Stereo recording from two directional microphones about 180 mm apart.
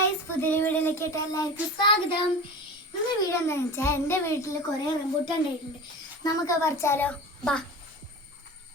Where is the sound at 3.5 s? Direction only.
15° left (ahead or behind).